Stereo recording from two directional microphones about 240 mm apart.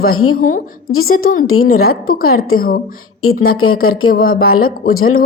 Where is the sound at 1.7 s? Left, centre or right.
Left.